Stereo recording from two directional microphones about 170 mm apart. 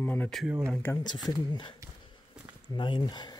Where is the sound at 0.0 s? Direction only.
10° left (ahead or behind).